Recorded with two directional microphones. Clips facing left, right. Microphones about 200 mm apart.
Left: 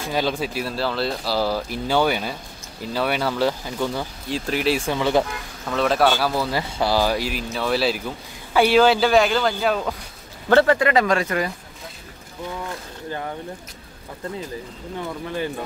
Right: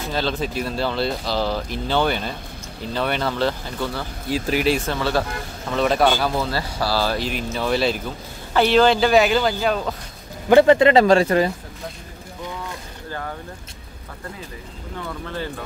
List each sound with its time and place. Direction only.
0.1 s speech: 10° left (ahead or behind)
4.3 s speech: 5° right (ahead or behind)
4.7 s speech: 15° left (ahead or behind)
5.7 s speech: centre (ahead or behind)
6.5 s speech: 15° left (ahead or behind)
10.5 s speech: 20° right (ahead or behind)
15.2 s speech: 15° left (ahead or behind)